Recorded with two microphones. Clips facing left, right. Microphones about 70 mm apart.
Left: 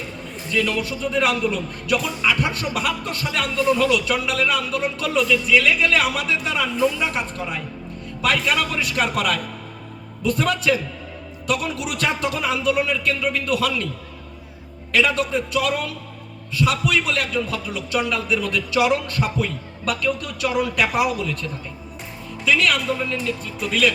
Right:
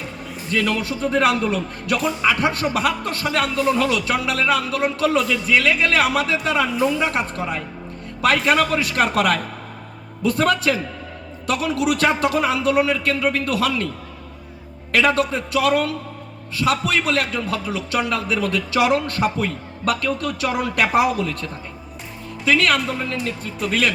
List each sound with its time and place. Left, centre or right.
0.5 s a man's voice: right
14.9 s a man's voice: right